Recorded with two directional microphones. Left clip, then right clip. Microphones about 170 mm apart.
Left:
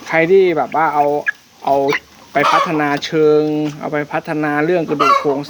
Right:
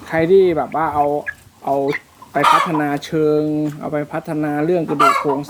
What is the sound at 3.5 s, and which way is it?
Speech, 40° left (ahead or behind).